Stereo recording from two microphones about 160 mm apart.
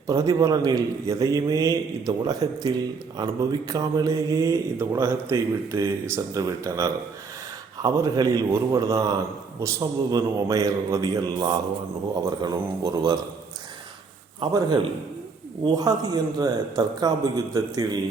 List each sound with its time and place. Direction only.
0.1 s speech: 20° right (ahead or behind)
14.5 s speech: 25° right (ahead or behind)